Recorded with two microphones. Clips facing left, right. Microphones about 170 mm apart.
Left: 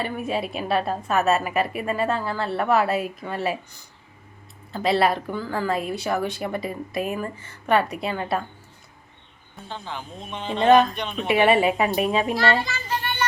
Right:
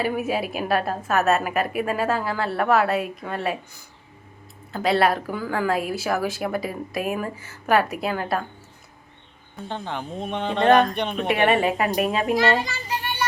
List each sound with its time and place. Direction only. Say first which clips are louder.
0.0 s speech: right 2 dB; 5° right (ahead or behind)
4.7 s speech: right 1 dB; centre (ahead or behind)
9.6 s speech: right 4 dB; 55° right (ahead or behind)
11.9 s a child's voice: even; 10° right (ahead or behind)